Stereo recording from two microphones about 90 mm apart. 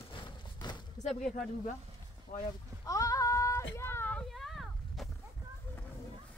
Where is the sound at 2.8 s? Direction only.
40° left (ahead or behind).